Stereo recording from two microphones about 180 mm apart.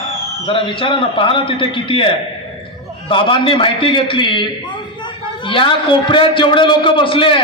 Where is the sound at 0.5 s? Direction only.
30° left (ahead or behind).